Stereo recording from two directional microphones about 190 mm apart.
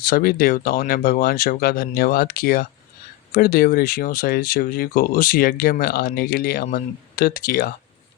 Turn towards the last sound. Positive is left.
turn(degrees=50)  # may be behind; listen again after turning